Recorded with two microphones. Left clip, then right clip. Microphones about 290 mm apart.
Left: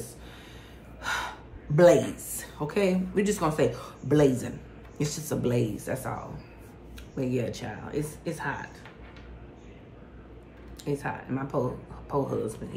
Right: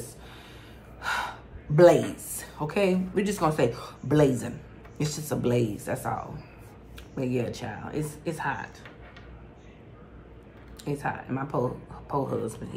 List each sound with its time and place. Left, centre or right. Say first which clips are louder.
1.0 s gasp: right 2 dB; centre
1.8 s a woman's voice: right 1 dB; centre
7.2 s speech: right 1 dB; centre
10.8 s speech: right 1 dB; centre